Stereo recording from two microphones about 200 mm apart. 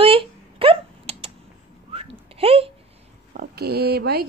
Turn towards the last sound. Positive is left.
turn(degrees=-50)  # may be behind; listen again after turning